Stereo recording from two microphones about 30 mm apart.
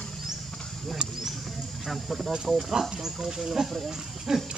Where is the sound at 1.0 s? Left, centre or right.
Centre.